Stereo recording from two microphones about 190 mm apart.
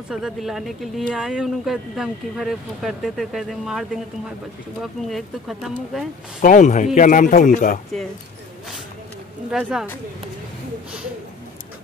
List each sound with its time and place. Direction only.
0.1 s speech: centre (ahead or behind)
6.4 s a man's voice: 40° left (ahead or behind)
9.5 s speech: 5° right (ahead or behind)